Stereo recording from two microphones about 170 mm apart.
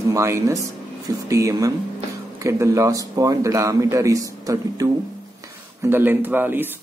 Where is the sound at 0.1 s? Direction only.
15° right (ahead or behind).